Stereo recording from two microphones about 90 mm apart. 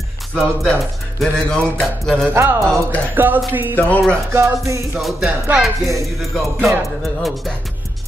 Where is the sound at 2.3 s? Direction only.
30° right (ahead or behind).